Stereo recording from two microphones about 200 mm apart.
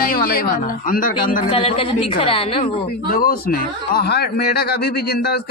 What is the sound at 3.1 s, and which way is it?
A man's voice, 45° left (ahead or behind).